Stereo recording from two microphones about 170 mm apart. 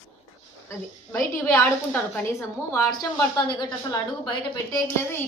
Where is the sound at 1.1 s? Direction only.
15° left (ahead or behind).